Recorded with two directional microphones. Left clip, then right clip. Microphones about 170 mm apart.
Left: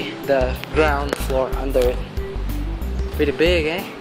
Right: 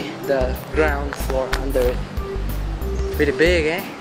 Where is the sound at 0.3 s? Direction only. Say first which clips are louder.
Left 2 dB; 40° left (ahead or behind).